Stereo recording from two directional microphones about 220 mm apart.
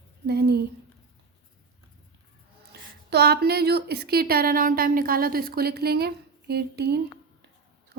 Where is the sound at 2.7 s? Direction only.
45° right (ahead or behind).